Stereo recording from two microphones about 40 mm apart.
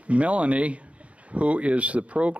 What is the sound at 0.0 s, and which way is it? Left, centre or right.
Speech, right.